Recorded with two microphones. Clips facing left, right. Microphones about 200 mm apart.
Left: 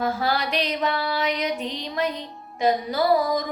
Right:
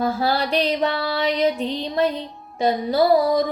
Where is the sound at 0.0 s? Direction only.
30° right (ahead or behind).